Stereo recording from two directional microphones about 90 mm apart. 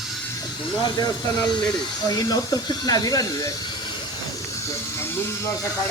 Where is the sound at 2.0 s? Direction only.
45° left (ahead or behind).